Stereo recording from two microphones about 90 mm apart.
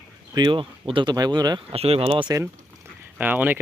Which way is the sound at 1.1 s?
50° right (ahead or behind).